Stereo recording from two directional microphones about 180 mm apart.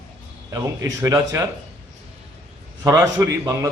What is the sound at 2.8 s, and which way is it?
Speech, 15° right (ahead or behind).